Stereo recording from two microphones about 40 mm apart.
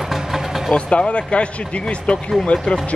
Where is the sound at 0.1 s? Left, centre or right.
Centre.